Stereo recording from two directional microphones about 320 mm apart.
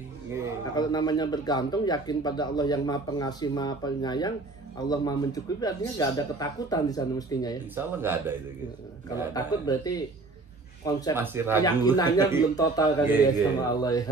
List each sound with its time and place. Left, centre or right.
0.7 s speech: centre
7.7 s speech: centre
9.3 s speech: centre
11.1 s speech: centre
11.6 s speech: centre